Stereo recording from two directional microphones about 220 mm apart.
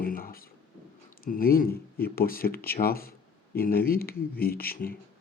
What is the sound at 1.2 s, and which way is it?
Speech, 40° left (ahead or behind).